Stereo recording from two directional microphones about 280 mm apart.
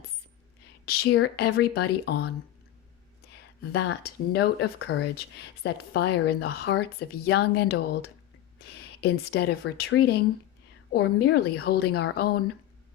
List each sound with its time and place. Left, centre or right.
0.9 s speech: left
3.3 s speech: left